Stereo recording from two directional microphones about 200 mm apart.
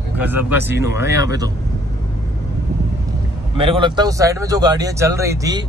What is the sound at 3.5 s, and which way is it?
Speech, 25° right (ahead or behind).